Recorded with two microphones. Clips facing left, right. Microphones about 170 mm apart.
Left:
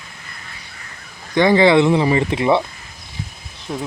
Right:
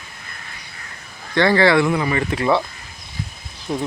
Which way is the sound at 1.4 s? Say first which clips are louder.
Left 3 dB; 20° left (ahead or behind).